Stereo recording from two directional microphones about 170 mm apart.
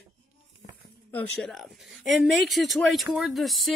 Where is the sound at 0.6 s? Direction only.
40° left (ahead or behind).